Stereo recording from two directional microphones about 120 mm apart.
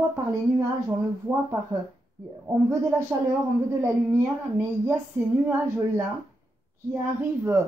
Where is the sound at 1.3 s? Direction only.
15° right (ahead or behind).